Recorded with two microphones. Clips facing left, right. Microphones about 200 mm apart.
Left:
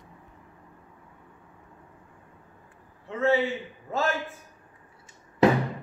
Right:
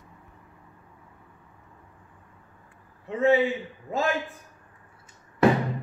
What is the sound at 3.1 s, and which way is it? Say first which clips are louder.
Speech: right 3 dB; 15° right (ahead or behind).